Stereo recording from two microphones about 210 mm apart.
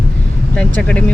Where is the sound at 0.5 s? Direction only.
5° left (ahead or behind).